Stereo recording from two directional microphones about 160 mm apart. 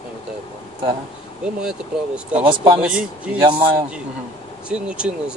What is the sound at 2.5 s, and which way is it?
Speech, 30° right (ahead or behind).